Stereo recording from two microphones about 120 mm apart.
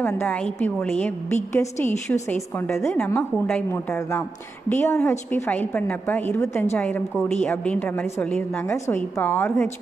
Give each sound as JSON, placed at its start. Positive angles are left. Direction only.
{"t": 0.0, "sound": "a woman's voice", "side_deg": 15}
{"t": 7.4, "sound": "a woman's voice", "side_deg": 10}